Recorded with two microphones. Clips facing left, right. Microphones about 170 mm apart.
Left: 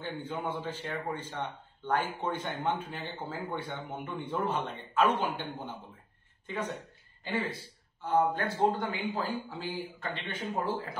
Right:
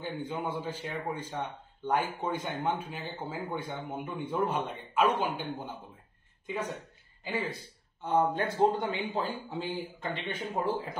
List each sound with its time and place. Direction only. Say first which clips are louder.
0.0 s a man's voice: right 1 dB; 10° right (ahead or behind)
6.4 s speech: right 1 dB; 10° right (ahead or behind)
8.0 s speech: even; 25° right (ahead or behind)